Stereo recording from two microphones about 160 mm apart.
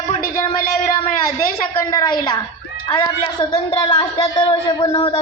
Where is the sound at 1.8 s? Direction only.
25° left (ahead or behind).